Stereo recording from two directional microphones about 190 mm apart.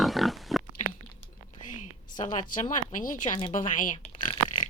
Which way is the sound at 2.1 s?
40° left (ahead or behind).